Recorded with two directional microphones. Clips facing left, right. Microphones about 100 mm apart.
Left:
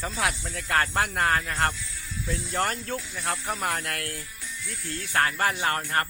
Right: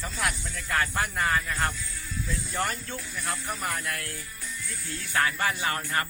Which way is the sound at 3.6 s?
70° left (ahead or behind).